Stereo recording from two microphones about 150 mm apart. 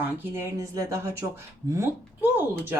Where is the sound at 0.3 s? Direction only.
20° right (ahead or behind).